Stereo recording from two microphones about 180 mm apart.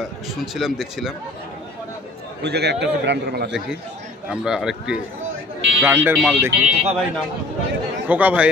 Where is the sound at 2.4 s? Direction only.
65° right (ahead or behind).